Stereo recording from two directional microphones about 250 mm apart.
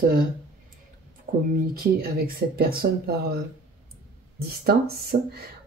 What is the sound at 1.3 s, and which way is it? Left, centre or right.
Speech, right.